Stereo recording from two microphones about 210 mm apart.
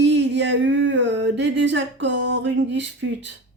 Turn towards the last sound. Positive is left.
turn(degrees=-60)  # may be behind; listen again after turning